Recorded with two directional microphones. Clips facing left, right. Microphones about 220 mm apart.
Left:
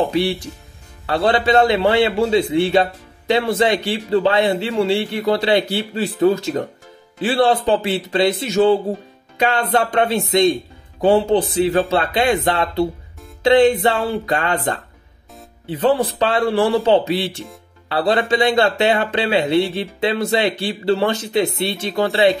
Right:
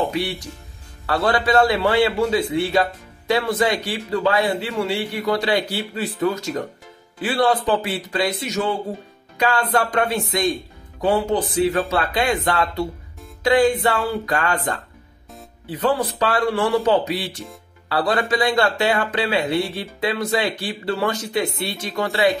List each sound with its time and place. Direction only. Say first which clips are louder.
1.0 s a man's voice: left 3 dB; 25° left (ahead or behind)